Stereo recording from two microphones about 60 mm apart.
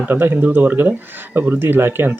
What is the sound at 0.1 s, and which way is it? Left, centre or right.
Speech, right.